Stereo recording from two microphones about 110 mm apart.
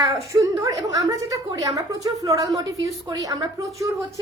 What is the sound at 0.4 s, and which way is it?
Speech, 30° right (ahead or behind).